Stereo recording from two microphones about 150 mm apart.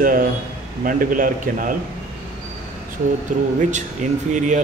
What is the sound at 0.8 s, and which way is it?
Speech, 65° right (ahead or behind).